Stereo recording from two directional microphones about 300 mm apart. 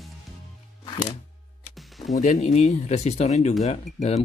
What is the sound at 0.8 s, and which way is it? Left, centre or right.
Music, centre.